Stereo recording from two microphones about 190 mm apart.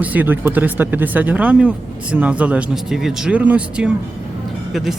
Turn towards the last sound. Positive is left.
turn(degrees=-5)  # may be behind; listen again after turning